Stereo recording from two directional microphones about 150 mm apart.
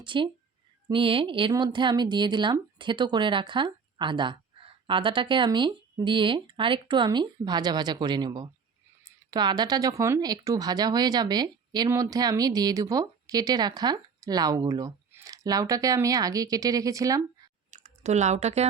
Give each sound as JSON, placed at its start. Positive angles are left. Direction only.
{"t": 0.0, "sound": "speech", "side_deg": -35}
{"t": 17.7, "sound": "speech", "side_deg": -50}